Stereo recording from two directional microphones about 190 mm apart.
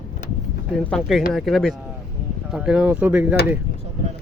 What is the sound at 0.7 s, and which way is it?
Speech, centre (ahead or behind).